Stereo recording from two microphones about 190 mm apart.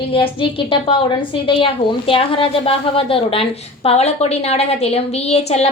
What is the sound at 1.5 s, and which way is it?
A woman's voice, 25° left (ahead or behind).